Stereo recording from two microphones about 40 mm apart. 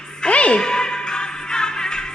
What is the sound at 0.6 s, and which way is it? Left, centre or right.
Music, centre.